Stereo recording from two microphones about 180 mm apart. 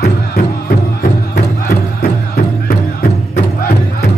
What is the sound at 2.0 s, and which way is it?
Music, 60° left (ahead or behind).